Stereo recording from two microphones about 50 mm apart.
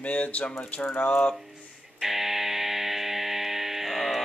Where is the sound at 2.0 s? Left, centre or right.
Centre.